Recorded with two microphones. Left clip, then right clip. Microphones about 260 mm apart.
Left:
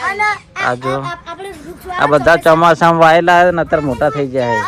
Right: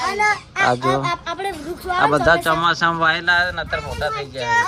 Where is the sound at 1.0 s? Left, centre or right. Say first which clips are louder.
Right 2 dB; right.